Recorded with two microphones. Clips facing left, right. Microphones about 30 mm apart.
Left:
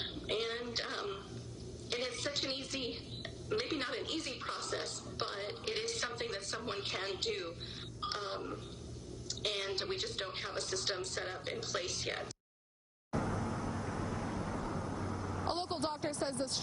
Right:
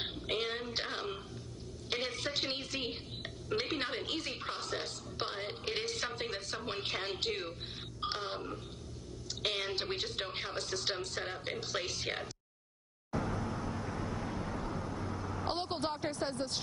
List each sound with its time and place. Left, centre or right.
0.0 s a sound: centre
3.5 s music: right
9.3 s speech: centre
13.1 s vehicle: centre